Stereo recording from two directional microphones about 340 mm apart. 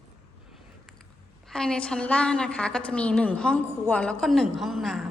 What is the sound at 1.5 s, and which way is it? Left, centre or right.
A woman's voice, centre.